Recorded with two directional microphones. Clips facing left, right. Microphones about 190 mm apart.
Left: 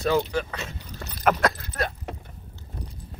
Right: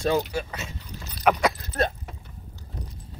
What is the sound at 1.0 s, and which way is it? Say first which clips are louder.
Dog: left 4 dB; 55° left (ahead or behind).